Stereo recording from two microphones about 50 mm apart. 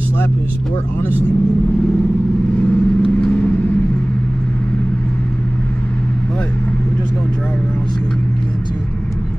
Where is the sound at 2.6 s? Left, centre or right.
Centre.